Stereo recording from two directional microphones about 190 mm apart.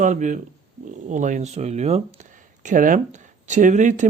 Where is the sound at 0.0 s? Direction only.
40° right (ahead or behind).